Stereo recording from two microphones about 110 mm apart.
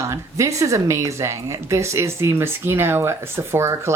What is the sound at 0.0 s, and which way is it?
A woman's voice, 25° right (ahead or behind).